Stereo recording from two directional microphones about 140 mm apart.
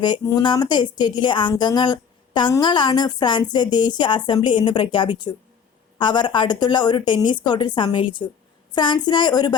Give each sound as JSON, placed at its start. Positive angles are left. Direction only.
{"t": 0.0, "sound": "speech", "side_deg": 30}